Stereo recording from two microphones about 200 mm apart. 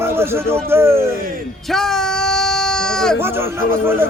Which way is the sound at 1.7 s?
Centre (ahead or behind).